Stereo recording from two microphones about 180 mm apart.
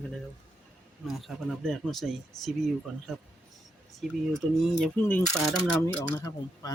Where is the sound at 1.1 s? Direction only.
Centre (ahead or behind).